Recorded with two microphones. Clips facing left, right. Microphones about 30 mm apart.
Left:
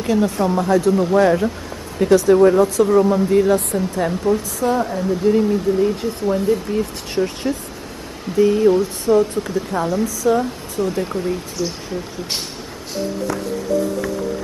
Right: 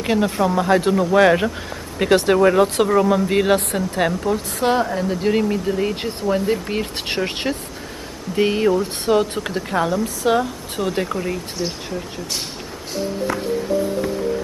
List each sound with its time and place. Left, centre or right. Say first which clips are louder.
0.0 s speech: left 1 dB; right
0.7 s speech: left 2 dB; right
1.1 s speech: right 4 dB; right
11.6 s speech: left 1 dB; right
13.3 s music: even; right